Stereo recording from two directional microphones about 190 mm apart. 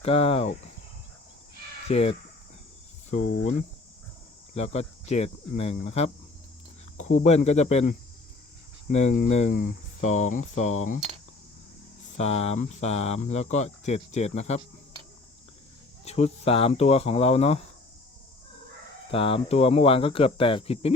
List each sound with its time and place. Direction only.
0.0 s speech: 30° left (ahead or behind)
1.9 s speech: 35° left (ahead or behind)
4.5 s speech: 35° left (ahead or behind)
7.3 s speech: 35° left (ahead or behind)
12.1 s speech: 35° left (ahead or behind)
16.0 s speech: 35° left (ahead or behind)
19.1 s speech: 30° left (ahead or behind)